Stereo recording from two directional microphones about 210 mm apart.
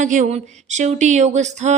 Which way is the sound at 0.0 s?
35° right (ahead or behind).